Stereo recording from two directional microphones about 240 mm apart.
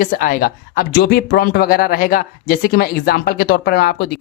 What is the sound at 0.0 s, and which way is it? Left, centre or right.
Speech, left.